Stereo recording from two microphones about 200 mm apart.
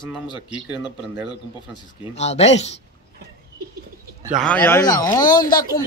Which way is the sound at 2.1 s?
35° left (ahead or behind).